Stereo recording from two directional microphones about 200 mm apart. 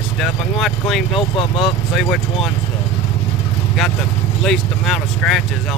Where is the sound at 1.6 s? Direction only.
Centre (ahead or behind).